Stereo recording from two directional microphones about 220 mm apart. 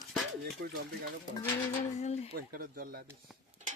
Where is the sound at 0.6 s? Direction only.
45° right (ahead or behind).